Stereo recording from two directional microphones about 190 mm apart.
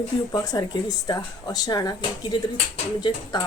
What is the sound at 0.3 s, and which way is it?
Speech, 20° left (ahead or behind).